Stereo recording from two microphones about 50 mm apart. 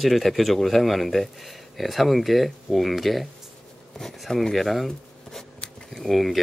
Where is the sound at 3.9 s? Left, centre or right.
Centre.